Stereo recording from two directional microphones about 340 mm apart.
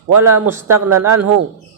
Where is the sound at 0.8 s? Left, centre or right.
Right.